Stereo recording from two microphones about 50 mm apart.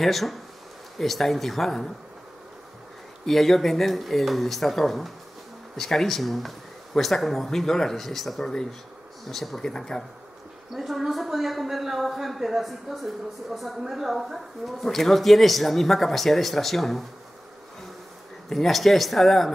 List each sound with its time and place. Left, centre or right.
0.0 s speech: centre
3.3 s speech: centre
10.7 s speech: centre
18.5 s speech: centre